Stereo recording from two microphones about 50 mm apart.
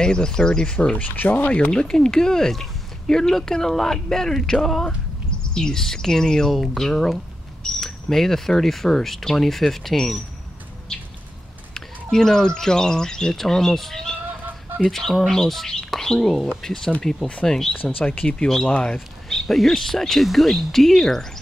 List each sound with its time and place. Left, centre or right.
0.0 s speech: centre
0.9 s speech: left
1.7 s speech: centre
11.7 s speech: centre
18.7 s speech: left
18.9 s speech: centre